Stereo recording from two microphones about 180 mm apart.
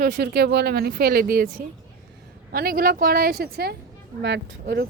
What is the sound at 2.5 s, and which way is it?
A woman's voice, 55° right (ahead or behind).